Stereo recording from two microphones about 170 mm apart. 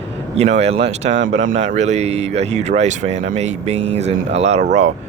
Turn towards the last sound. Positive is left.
turn(degrees=-45)  # may be behind; listen again after turning